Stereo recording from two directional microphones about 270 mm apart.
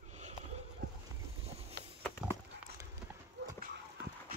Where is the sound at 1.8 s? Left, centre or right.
Right.